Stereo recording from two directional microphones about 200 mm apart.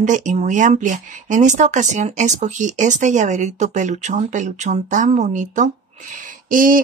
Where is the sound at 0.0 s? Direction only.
40° right (ahead or behind).